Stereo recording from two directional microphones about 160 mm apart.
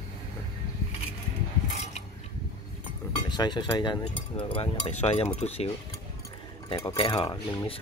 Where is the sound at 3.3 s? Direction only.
25° left (ahead or behind).